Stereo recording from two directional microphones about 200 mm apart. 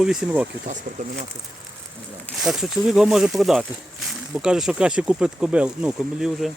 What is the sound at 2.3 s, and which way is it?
Speech, centre (ahead or behind).